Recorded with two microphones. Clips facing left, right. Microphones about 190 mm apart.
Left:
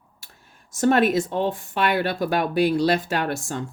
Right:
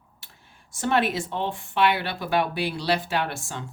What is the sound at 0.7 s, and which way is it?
Speech, 45° left (ahead or behind).